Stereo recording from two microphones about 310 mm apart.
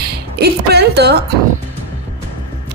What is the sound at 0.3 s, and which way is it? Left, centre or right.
Speech, right.